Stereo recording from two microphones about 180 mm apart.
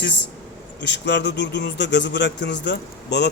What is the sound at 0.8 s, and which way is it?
Speech, 75° left (ahead or behind).